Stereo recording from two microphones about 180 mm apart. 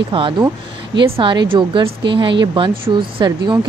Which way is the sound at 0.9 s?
25° right (ahead or behind).